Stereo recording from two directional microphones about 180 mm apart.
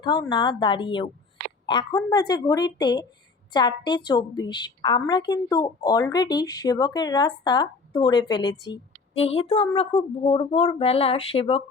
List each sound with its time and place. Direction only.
0.0 s a woman's voice: 25° left (ahead or behind)